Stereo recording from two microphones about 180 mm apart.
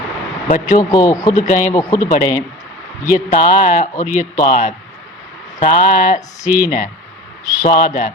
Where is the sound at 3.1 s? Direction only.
45° left (ahead or behind).